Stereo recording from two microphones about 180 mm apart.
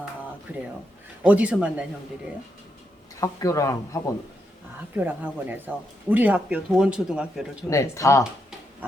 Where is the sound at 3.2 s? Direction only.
15° left (ahead or behind).